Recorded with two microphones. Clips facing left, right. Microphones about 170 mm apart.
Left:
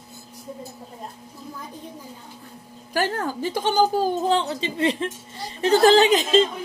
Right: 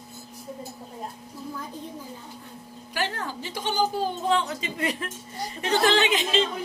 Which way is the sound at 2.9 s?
45° left (ahead or behind).